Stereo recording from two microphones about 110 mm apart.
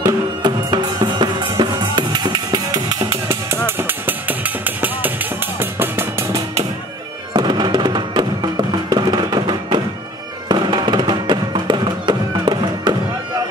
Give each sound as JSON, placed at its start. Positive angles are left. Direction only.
{"t": 0.0, "sound": "music", "side_deg": -40}
{"t": 3.3, "sound": "music", "side_deg": -25}
{"t": 7.3, "sound": "music", "side_deg": -40}